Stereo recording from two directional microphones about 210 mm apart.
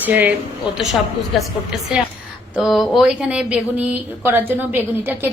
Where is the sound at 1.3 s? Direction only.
Centre (ahead or behind).